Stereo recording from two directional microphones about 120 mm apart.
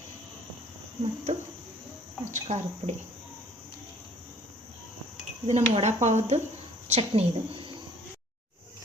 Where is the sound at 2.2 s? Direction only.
80° right.